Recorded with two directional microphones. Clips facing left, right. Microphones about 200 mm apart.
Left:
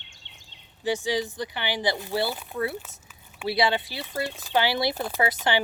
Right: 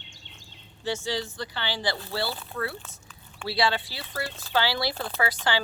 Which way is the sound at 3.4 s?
20° left (ahead or behind).